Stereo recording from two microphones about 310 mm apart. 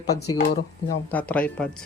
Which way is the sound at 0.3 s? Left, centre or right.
Left.